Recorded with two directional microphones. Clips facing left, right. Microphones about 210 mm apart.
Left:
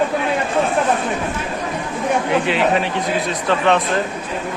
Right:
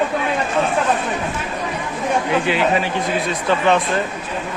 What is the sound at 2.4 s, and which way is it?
Speech, centre (ahead or behind).